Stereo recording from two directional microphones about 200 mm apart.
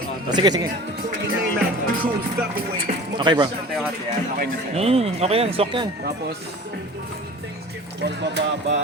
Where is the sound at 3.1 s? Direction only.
20° right (ahead or behind).